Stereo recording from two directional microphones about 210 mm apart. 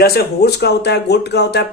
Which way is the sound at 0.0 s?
50° left (ahead or behind).